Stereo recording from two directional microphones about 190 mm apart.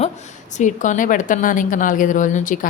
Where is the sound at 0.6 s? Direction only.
40° left (ahead or behind).